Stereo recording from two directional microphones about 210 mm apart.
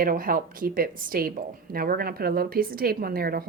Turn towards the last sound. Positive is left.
turn(degrees=-45)  # may be behind; listen again after turning